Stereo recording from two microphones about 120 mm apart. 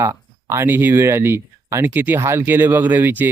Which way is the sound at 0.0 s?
25° right (ahead or behind).